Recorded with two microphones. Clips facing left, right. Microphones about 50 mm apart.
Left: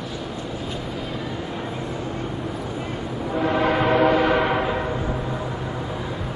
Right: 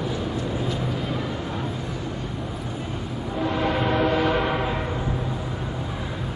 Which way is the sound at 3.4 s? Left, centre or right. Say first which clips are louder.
Left 3 dB; left.